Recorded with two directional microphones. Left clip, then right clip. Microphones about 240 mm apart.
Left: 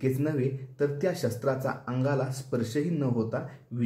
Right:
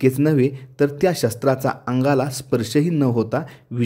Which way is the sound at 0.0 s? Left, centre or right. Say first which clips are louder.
Right 11 dB; right.